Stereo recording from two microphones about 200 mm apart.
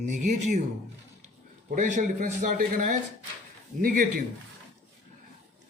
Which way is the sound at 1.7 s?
40° right (ahead or behind).